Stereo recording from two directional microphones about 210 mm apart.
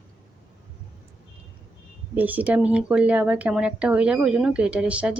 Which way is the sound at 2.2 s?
5° right (ahead or behind).